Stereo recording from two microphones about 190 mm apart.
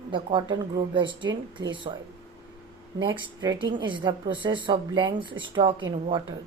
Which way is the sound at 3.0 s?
20° right (ahead or behind).